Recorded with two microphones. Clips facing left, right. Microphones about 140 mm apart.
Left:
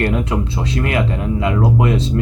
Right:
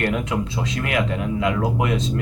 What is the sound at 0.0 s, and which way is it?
Speech, 35° left (ahead or behind).